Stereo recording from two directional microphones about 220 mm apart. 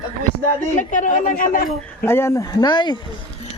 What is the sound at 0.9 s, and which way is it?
Speech, 35° left (ahead or behind).